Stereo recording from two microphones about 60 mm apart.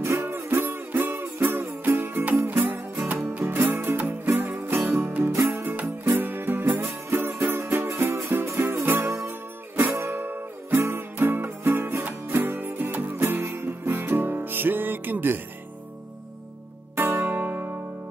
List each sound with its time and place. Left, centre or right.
0.2 s music: right
16.9 s music: right
17.2 s music: right